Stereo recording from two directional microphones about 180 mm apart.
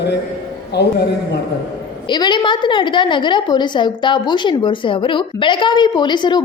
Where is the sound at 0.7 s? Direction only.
65° left (ahead or behind).